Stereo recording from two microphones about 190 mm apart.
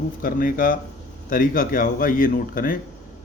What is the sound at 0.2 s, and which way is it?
Speech, 45° left (ahead or behind).